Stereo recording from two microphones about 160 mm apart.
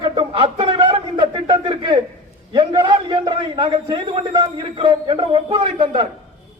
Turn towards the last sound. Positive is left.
turn(degrees=-30)  # may be behind; listen again after turning